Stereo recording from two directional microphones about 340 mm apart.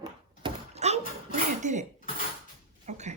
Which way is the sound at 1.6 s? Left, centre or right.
Right.